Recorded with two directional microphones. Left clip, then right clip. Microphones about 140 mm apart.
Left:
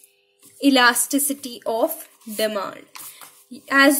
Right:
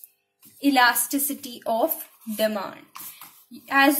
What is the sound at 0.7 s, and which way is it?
A woman's voice, 45° left (ahead or behind).